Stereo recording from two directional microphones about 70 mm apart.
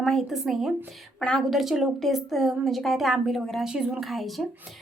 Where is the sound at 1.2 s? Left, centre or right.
Centre.